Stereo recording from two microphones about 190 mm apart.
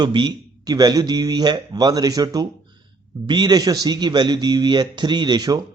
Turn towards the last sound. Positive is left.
turn(degrees=-20)  # may be behind; listen again after turning